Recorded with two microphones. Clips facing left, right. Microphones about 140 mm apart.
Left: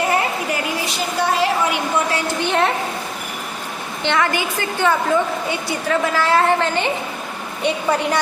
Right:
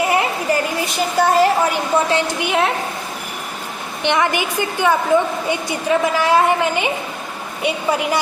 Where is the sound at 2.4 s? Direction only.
5° right (ahead or behind).